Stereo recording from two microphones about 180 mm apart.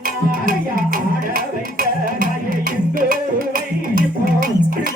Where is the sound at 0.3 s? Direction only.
50° right (ahead or behind).